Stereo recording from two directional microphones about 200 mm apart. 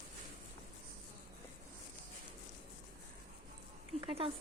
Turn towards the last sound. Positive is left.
turn(degrees=-25)  # may be behind; listen again after turning